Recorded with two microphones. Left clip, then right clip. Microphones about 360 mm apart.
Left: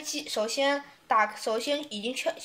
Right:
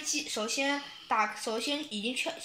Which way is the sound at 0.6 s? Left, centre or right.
Left.